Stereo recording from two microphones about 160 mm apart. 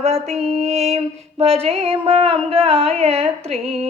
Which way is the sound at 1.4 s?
35° right (ahead or behind).